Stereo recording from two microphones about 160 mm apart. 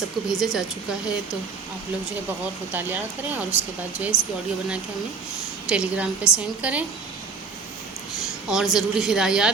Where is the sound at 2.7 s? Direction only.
10° right (ahead or behind).